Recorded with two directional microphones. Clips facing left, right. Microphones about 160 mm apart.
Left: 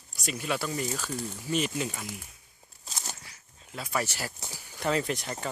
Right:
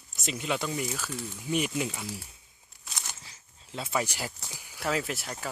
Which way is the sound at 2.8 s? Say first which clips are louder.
Left 2 dB; 40° left (ahead or behind).